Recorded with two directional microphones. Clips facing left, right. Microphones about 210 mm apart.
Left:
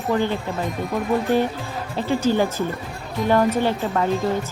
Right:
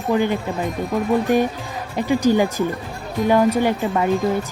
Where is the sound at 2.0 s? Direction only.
15° right (ahead or behind).